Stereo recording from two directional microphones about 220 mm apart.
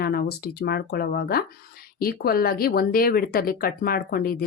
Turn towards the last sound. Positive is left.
turn(degrees=45)  # may be behind; listen again after turning